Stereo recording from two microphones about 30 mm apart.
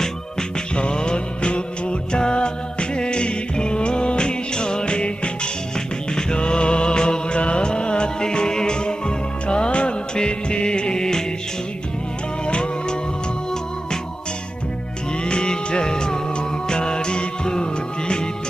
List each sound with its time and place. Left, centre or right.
0.8 s music: left
12.5 s music: left
15.2 s music: left